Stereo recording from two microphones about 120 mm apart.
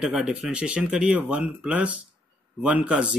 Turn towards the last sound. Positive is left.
turn(degrees=-10)  # may be behind; listen again after turning